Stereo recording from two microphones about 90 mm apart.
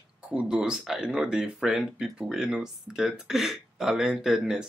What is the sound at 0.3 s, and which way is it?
Speech, 10° right (ahead or behind).